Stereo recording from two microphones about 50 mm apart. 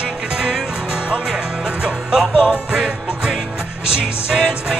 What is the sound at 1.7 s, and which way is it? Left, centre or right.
Music, centre.